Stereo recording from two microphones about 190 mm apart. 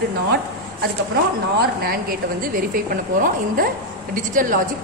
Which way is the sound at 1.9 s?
50° right (ahead or behind).